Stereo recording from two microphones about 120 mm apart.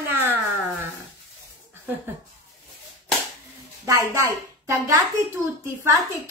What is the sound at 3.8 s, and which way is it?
Speech, 25° right (ahead or behind).